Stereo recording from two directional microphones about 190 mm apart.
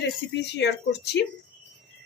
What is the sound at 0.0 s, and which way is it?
Speech, 65° left (ahead or behind).